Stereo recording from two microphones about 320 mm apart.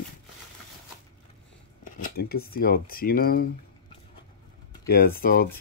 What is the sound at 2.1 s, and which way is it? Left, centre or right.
Speech, left.